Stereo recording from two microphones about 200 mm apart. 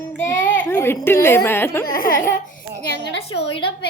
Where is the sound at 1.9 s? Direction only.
45° left (ahead or behind).